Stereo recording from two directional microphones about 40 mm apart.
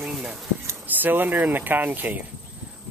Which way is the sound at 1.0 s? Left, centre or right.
Right.